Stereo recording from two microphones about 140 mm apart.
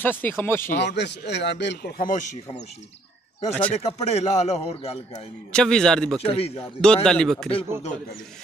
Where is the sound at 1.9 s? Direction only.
65° left (ahead or behind).